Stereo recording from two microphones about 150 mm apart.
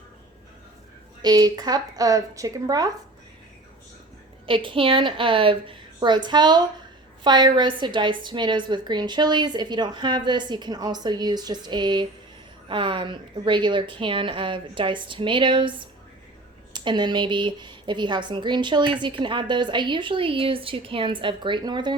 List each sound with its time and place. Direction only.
1.2 s a woman's voice: 25° right (ahead or behind)
4.4 s a woman's voice: 35° right (ahead or behind)
16.7 s a woman's voice: 30° right (ahead or behind)